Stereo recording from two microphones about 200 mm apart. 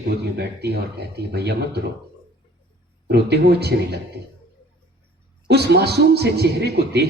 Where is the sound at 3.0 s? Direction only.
55° right (ahead or behind).